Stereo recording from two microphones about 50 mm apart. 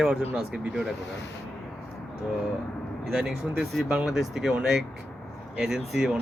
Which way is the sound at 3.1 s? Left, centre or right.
Centre.